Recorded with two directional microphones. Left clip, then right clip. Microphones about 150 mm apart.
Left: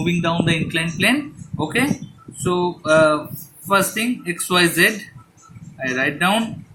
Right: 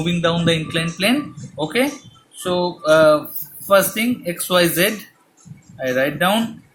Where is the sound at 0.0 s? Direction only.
40° right (ahead or behind).